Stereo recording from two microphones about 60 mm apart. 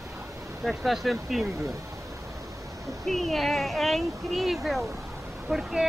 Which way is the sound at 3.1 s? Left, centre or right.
Centre.